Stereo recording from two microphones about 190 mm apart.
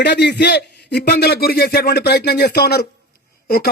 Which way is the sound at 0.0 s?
60° left (ahead or behind).